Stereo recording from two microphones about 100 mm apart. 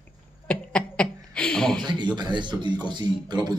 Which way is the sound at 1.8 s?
50° right (ahead or behind).